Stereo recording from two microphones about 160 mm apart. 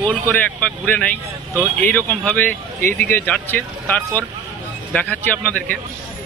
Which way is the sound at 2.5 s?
55° right (ahead or behind).